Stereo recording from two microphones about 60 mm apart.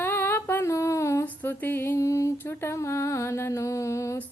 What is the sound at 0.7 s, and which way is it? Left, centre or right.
Speech, left.